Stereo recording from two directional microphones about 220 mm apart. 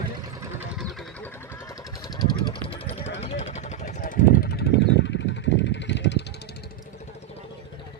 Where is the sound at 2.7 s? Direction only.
30° left (ahead or behind); by 6.2 s 55° left (ahead or behind).